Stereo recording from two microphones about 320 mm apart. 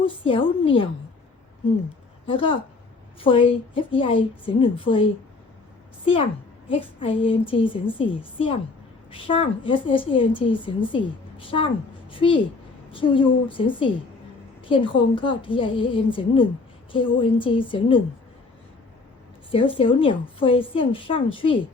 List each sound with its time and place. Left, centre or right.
0.0 s a woman's voice: centre
2.2 s a woman's voice: centre
6.7 s a woman's voice: centre
19.5 s a woman's voice: centre